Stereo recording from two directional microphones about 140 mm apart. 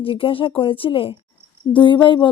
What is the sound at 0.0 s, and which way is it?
A woman's voice, 40° left (ahead or behind).